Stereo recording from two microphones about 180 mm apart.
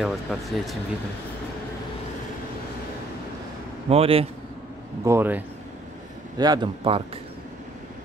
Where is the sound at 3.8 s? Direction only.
30° right (ahead or behind).